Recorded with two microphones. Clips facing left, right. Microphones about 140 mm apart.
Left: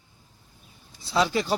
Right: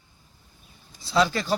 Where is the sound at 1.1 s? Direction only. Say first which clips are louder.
Right 1 dB; 10° left (ahead or behind).